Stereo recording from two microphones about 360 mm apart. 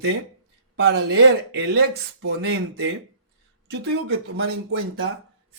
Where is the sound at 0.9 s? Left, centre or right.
Right.